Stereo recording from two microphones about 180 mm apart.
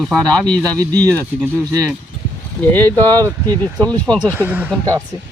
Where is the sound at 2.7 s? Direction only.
10° left (ahead or behind).